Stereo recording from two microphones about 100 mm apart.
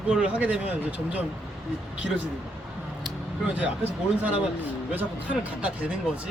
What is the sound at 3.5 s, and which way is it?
Speech, 15° right (ahead or behind).